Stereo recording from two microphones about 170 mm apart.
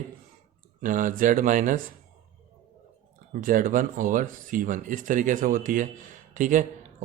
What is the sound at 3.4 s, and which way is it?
Speech, 55° right (ahead or behind).